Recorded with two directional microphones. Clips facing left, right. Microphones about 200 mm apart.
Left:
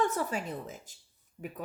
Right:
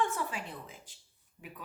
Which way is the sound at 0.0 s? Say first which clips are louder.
Left 4 dB; 40° left (ahead or behind).